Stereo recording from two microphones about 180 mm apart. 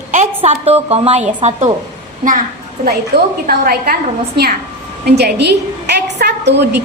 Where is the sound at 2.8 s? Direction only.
50° right (ahead or behind).